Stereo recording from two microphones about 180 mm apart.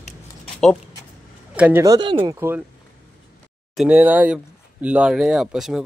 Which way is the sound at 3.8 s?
10° right (ahead or behind).